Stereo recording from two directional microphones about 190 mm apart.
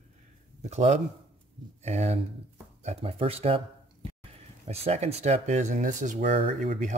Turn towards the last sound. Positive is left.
turn(degrees=-30)  # may be behind; listen again after turning